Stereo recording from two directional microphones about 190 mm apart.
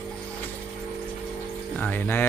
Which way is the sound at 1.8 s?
10° left (ahead or behind).